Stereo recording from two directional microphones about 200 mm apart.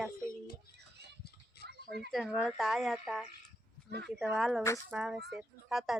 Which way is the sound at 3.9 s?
55° right (ahead or behind).